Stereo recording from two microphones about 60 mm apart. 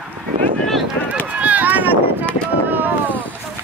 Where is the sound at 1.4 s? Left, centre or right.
Right.